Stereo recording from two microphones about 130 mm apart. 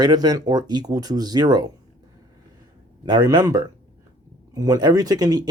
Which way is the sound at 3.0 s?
30° right (ahead or behind).